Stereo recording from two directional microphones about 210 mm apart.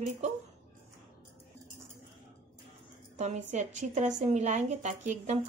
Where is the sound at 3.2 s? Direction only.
35° right (ahead or behind).